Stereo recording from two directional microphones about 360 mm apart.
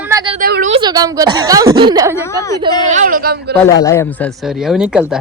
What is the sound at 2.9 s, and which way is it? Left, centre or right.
Speech, right.